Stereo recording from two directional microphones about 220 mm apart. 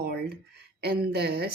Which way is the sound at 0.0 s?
45° right (ahead or behind).